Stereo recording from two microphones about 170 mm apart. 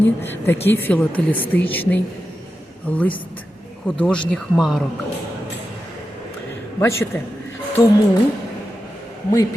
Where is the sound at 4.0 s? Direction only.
5° left (ahead or behind).